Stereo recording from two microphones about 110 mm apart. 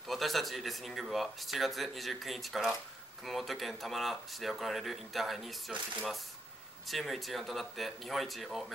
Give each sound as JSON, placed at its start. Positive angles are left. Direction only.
{"t": 0.1, "sound": "speech", "side_deg": 0}
{"t": 6.9, "sound": "speech", "side_deg": 0}